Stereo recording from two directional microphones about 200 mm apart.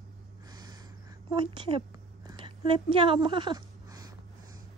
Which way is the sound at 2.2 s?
25° right (ahead or behind).